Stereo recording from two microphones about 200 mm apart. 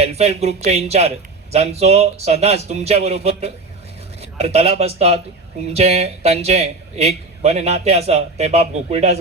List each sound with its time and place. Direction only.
0.0 s a man's voice: 30° right (ahead or behind)